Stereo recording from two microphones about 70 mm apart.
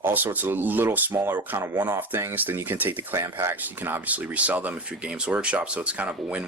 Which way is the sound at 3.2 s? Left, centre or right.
Right.